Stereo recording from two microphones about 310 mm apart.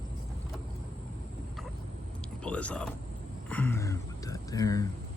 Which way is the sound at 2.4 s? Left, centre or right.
Centre.